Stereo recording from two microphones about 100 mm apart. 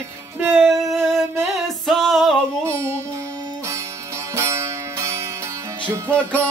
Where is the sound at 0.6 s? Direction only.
Centre (ahead or behind).